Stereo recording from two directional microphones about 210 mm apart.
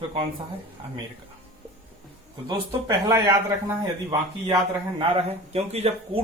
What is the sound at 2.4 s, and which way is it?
Speech, 20° right (ahead or behind).